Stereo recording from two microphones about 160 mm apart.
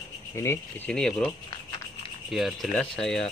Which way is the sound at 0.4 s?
15° left (ahead or behind).